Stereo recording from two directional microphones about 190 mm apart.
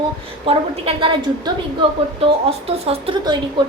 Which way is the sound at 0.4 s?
30° right (ahead or behind).